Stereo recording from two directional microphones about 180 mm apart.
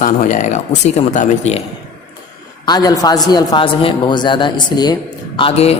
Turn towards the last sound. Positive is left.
turn(degrees=30)  # may be behind; listen again after turning